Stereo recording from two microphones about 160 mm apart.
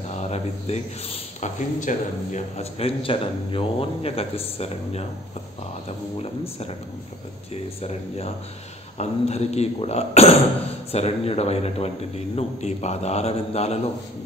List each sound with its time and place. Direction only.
0.1 s speech: 45° left (ahead or behind)
8.9 s speech: 45° left (ahead or behind)